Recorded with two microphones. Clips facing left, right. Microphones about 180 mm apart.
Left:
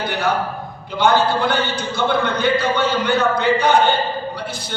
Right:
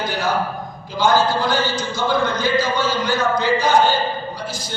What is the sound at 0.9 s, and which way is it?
Speech, 60° left (ahead or behind).